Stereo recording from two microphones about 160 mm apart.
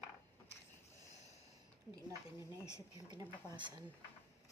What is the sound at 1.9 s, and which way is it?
A woman's voice, 25° right (ahead or behind).